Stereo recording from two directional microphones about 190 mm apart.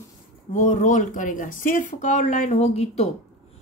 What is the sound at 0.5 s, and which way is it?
Speech, 40° left (ahead or behind).